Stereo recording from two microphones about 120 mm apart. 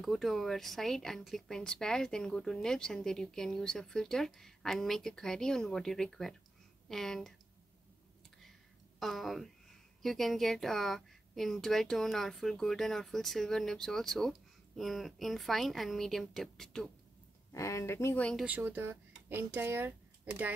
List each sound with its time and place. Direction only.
0.0 s a woman's voice: centre (ahead or behind)
9.0 s a woman's voice: centre (ahead or behind)
17.5 s speech: 25° left (ahead or behind)
18.4 s speech: 15° right (ahead or behind)